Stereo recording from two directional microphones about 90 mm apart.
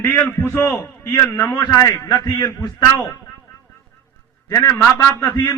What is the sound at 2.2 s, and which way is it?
Speech, 45° left (ahead or behind).